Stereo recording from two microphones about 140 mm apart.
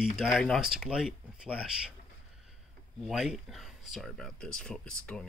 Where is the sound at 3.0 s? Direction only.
5° right (ahead or behind).